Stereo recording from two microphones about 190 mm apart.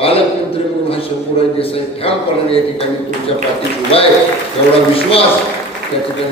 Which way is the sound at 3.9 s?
30° left (ahead or behind).